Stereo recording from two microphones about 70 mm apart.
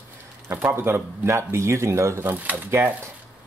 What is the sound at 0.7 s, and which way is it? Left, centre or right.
Speech, right.